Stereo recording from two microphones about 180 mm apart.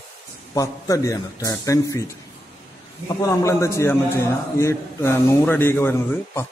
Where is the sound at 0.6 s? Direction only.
20° left (ahead or behind).